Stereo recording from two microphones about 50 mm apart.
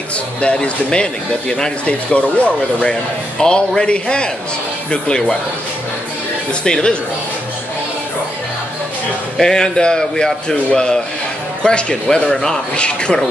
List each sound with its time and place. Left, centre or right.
0.4 s a man's voice: left
6.6 s a man's voice: centre
9.4 s a man's voice: centre